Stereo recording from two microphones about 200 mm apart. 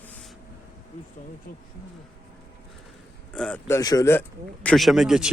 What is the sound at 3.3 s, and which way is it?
Speech, 5° left (ahead or behind).